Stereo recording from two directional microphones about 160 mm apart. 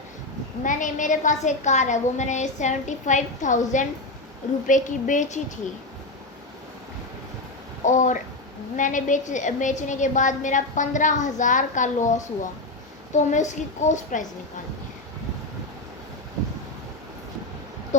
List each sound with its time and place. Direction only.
0.6 s a woman's voice: 55° left (ahead or behind)
7.9 s a woman's voice: 50° left (ahead or behind)